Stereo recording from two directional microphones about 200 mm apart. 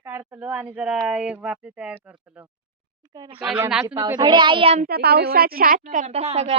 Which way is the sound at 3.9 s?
20° right (ahead or behind).